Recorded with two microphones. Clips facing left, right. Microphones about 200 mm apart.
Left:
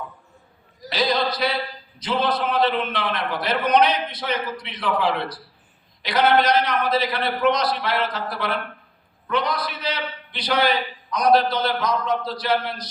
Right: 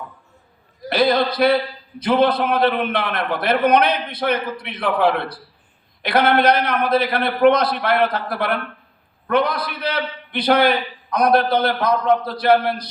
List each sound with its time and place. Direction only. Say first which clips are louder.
0.8 s a man's voice: right 5 dB; 55° right (ahead or behind)